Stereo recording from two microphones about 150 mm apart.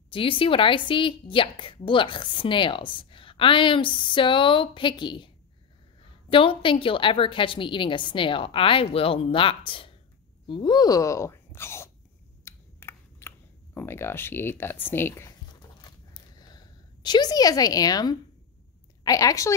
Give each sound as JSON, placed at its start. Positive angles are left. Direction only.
{"t": 0.1, "sound": "a woman's voice", "side_deg": 35}
{"t": 6.3, "sound": "a woman's voice", "side_deg": 35}
{"t": 12.4, "sound": "a sound", "side_deg": 15}
{"t": 13.7, "sound": "speech", "side_deg": 15}
{"t": 15.8, "sound": "zipper", "side_deg": 25}
{"t": 19.0, "sound": "a woman's voice", "side_deg": 25}